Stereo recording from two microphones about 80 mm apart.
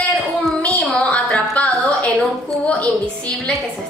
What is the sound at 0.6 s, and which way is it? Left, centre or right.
Music, centre.